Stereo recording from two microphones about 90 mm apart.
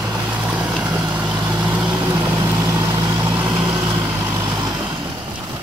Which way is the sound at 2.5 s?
35° right (ahead or behind).